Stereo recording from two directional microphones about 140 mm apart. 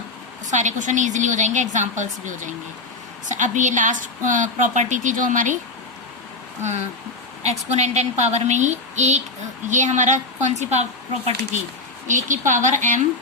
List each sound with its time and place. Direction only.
0.5 s a woman's voice: 60° right (ahead or behind)
7.4 s a woman's voice: 50° right (ahead or behind)
12.0 s a woman's voice: 60° right (ahead or behind)